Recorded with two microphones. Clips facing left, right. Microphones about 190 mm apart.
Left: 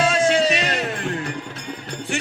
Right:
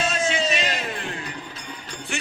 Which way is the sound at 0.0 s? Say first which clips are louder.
Left 6 dB; 65° left (ahead or behind).